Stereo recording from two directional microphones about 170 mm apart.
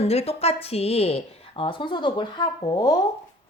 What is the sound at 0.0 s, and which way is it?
A woman's voice, 35° left (ahead or behind).